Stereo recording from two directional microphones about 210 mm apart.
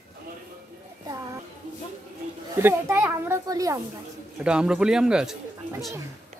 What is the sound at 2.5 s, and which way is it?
Speech, 10° right (ahead or behind).